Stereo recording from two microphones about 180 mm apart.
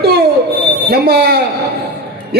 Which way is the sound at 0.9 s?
60° right (ahead or behind).